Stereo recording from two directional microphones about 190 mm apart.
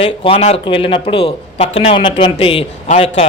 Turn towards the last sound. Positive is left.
turn(degrees=30)  # may be behind; listen again after turning